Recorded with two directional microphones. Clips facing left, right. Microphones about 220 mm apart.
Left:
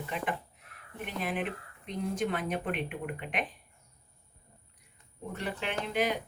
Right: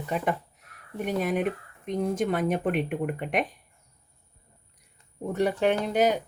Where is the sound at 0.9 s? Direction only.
45° right (ahead or behind).